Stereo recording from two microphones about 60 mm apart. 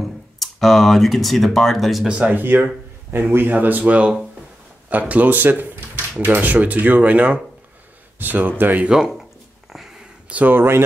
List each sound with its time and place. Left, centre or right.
0.4 s speech: centre
2.0 s speech: centre
2.3 s speech: right
8.8 s speech: centre
9.7 s a sound: centre
10.3 s speech: right